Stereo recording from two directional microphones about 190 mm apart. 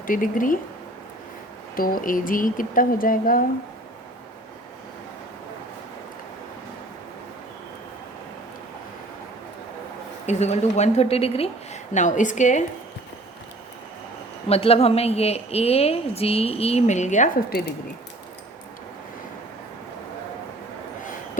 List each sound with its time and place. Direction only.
0.1 s speech: 45° left (ahead or behind)
1.7 s speech: 50° left (ahead or behind)
10.2 s a woman's voice: 35° left (ahead or behind)
14.5 s a woman's voice: 30° left (ahead or behind)